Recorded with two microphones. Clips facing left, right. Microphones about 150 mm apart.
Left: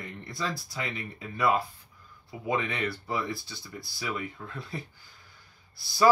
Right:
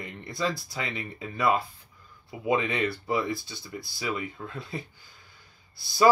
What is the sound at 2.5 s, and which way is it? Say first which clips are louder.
Speech: right 4 dB; 20° right (ahead or behind).